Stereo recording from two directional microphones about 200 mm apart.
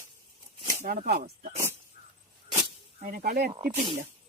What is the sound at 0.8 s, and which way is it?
Speech, 45° right (ahead or behind).